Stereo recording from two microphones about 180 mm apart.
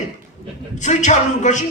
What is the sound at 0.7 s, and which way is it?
Speech, 40° left (ahead or behind).